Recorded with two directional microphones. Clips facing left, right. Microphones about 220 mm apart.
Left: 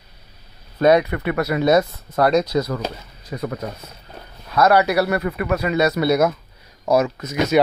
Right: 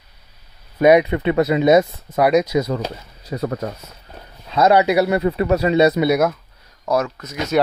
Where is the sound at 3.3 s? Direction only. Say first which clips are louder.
Right 3 dB; 35° right (ahead or behind).